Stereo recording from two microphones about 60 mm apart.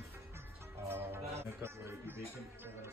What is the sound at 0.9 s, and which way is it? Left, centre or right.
Music, right.